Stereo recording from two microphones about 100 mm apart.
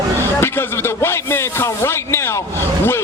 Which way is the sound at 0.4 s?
25° left (ahead or behind).